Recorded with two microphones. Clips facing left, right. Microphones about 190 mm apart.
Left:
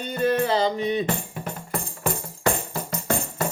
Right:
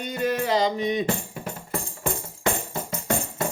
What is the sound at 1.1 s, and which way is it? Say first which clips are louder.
Music: even; 30° right (ahead or behind).